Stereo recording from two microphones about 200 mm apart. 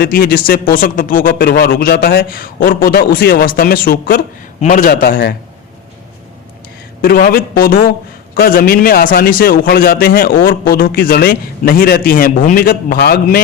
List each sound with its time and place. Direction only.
0.0 s a man's voice: 45° left (ahead or behind)
7.0 s a man's voice: 45° left (ahead or behind)